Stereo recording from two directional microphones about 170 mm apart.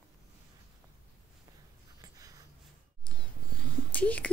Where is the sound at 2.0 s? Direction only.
20° right (ahead or behind).